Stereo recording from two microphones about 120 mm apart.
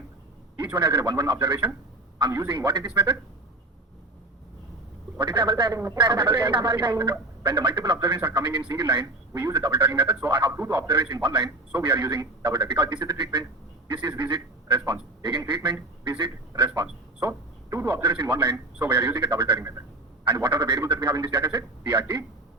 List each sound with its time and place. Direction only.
0.7 s a man's voice: 35° right (ahead or behind)
5.2 s a man's voice: 40° right (ahead or behind)
19.5 s speech: 25° right (ahead or behind)
20.3 s a man's voice: 40° right (ahead or behind)